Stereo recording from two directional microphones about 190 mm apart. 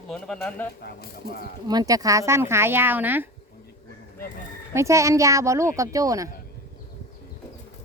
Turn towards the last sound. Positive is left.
turn(degrees=-15)  # may be behind; listen again after turning